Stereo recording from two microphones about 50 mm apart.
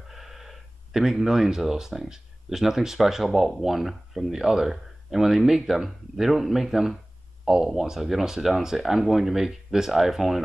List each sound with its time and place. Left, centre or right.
0.1 s speech: centre